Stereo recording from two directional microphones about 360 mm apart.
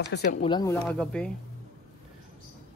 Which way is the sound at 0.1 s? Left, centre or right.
Left.